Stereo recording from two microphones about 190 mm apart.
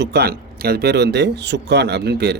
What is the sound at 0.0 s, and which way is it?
Speech, 60° right (ahead or behind).